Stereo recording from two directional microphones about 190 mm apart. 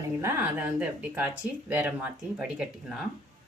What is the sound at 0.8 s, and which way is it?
Speech, 10° right (ahead or behind).